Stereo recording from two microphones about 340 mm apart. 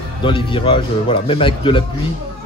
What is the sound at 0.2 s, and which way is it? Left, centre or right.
Speech, centre.